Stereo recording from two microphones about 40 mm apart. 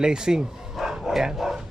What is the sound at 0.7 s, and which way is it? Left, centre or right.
Bow-wow, centre.